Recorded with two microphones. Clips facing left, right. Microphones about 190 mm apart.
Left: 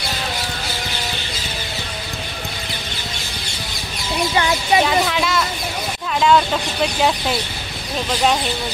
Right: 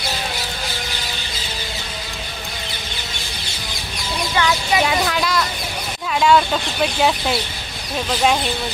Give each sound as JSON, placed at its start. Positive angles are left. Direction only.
{"t": 4.4, "sound": "chicken", "side_deg": 30}
{"t": 4.8, "sound": "speech", "side_deg": 0}